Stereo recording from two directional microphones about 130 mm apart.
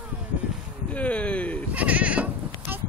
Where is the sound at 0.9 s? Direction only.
10° left (ahead or behind).